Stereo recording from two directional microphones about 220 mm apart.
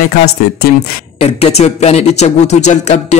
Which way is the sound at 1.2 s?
30° left (ahead or behind).